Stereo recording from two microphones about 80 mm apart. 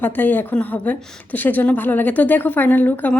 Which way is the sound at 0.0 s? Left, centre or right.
Left.